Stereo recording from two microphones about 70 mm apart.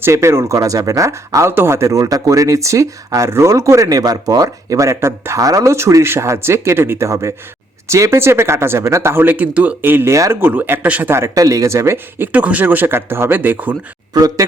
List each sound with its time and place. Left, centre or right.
0.0 s speech: right
5.4 s speech: right
10.1 s speech: right
10.4 s speech: right
11.3 s speech: right
12.3 s speech: right
14.1 s speech: right